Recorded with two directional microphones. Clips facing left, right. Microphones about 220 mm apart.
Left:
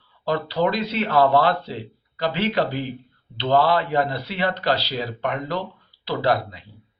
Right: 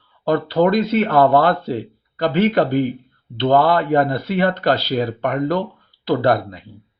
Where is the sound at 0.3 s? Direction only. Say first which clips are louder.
Right 6 dB; 50° right (ahead or behind).